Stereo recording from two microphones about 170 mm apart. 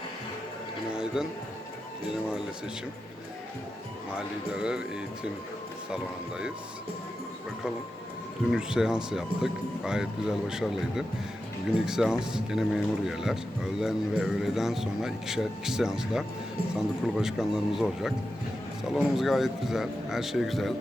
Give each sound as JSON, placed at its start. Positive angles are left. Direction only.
{"t": 0.9, "sound": "speech", "side_deg": -5}
{"t": 4.1, "sound": "speech", "side_deg": -5}
{"t": 8.4, "sound": "speech", "side_deg": -5}